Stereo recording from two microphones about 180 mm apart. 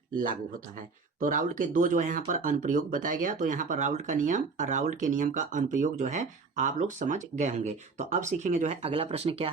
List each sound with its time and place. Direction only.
1.2 s speech: 50° right (ahead or behind)